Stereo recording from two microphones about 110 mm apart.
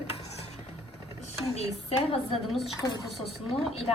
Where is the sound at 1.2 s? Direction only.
75° left (ahead or behind).